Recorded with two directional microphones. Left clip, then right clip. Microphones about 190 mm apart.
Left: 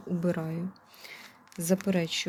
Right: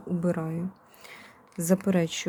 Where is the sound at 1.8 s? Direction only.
20° right (ahead or behind).